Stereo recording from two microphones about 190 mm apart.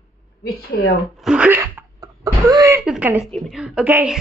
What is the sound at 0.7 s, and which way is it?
Speech, 60° left (ahead or behind).